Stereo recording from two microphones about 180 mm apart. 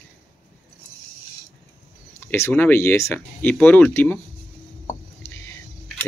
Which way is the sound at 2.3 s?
10° left (ahead or behind).